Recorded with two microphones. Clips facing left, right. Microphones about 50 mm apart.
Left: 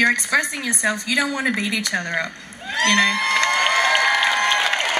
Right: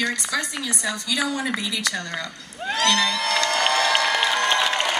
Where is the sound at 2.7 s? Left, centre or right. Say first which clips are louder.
Left 4 dB; left.